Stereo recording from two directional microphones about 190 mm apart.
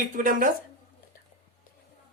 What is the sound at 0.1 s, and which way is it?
Speech, 45° right (ahead or behind).